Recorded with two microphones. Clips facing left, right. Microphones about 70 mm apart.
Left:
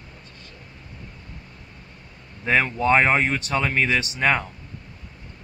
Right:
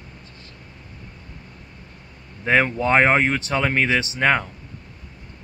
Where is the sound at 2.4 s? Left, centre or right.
Centre.